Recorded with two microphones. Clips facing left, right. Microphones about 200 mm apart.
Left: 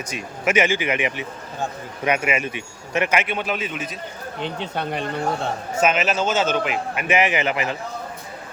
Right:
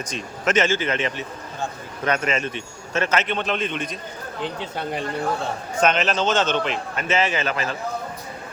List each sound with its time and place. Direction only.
0.1 s a man's voice: 10° left (ahead or behind)
4.6 s speech: 65° left (ahead or behind)
5.8 s a man's voice: 5° left (ahead or behind)